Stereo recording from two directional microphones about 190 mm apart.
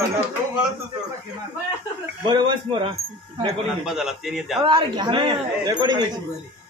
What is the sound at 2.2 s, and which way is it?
Speech, 25° right (ahead or behind).